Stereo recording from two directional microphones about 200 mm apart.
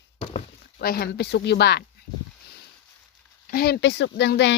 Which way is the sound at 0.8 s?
50° left (ahead or behind).